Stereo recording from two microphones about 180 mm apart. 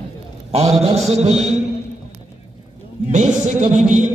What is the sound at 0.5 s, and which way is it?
A man's voice, 35° right (ahead or behind).